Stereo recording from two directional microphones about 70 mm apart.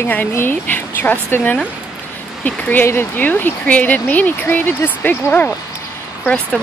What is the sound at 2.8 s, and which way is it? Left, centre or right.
Speech, left.